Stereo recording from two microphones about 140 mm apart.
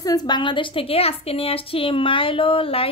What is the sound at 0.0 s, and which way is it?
A woman's voice, 30° left (ahead or behind).